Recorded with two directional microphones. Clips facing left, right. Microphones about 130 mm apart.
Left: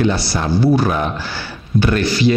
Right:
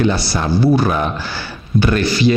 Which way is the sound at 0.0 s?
10° right (ahead or behind).